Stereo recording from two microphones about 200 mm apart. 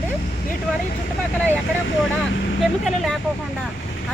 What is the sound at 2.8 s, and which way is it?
Speech, centre (ahead or behind).